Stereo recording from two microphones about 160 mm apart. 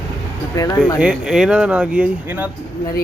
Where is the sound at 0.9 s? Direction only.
5° right (ahead or behind).